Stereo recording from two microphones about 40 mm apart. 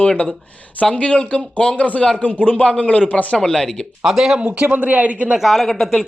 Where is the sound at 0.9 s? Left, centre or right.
Left.